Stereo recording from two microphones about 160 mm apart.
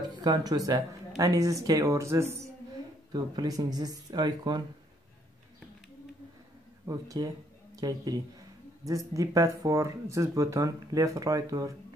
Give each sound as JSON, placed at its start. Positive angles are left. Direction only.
{"t": 0.2, "sound": "speech", "side_deg": -25}
{"t": 6.9, "sound": "speech", "side_deg": -20}